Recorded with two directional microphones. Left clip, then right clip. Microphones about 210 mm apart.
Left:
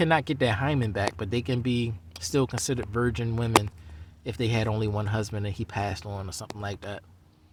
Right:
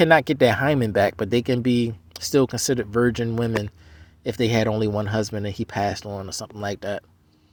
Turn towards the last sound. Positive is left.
turn(degrees=-30)  # may be behind; listen again after turning